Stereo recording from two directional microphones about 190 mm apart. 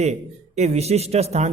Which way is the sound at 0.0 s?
35° right (ahead or behind).